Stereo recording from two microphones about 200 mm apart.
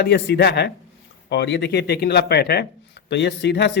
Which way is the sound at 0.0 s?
60° left (ahead or behind).